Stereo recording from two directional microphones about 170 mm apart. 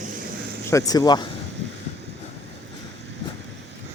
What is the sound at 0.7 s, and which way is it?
Speech, 20° left (ahead or behind).